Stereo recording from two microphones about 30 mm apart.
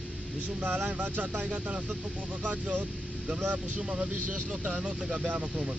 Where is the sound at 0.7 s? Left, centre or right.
Right.